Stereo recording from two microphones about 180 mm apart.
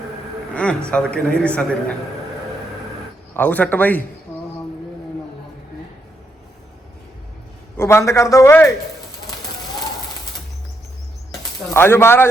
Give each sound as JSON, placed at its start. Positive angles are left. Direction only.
{"t": 0.5, "sound": "a man's voice", "side_deg": 5}
{"t": 3.3, "sound": "a man's voice", "side_deg": 10}
{"t": 7.8, "sound": "a man's voice", "side_deg": 15}
{"t": 11.6, "sound": "speech", "side_deg": 10}